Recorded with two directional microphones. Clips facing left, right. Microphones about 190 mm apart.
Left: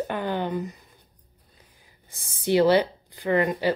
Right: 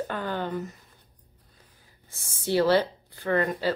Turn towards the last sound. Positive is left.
turn(degrees=15)  # may be behind; listen again after turning